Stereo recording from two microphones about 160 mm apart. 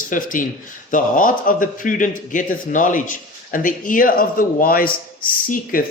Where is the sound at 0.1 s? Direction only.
55° left (ahead or behind).